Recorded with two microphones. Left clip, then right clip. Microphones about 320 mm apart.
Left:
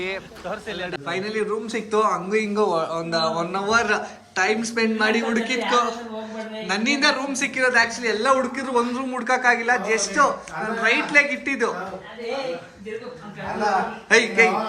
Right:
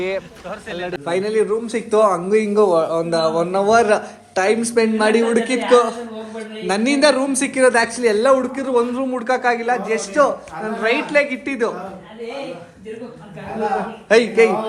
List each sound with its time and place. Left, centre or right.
0.4 s a man's voice: left
0.9 s a man's voice: centre
14.1 s a man's voice: centre